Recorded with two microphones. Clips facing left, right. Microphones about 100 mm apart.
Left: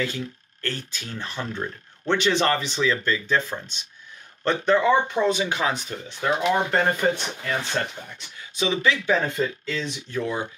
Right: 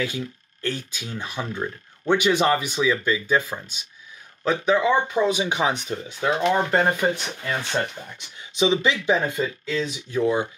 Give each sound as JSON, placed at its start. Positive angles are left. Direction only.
{"t": 0.0, "sound": "speech", "side_deg": -15}
{"t": 5.4, "sound": "speech", "side_deg": -20}
{"t": 6.3, "sound": "speech", "side_deg": 0}
{"t": 6.7, "sound": "speech", "side_deg": -10}
{"t": 9.2, "sound": "speech", "side_deg": -5}
{"t": 10.1, "sound": "speech", "side_deg": -20}